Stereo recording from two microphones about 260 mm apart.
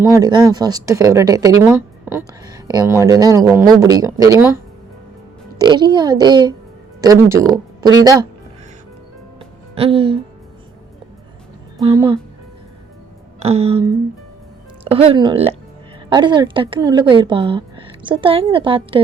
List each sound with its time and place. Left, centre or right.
0.1 s speech: centre
5.5 s speech: centre
9.7 s speech: right
11.8 s speech: centre
13.4 s speech: right